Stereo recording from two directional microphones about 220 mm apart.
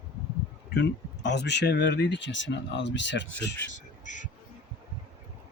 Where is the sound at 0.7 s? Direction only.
50° left (ahead or behind).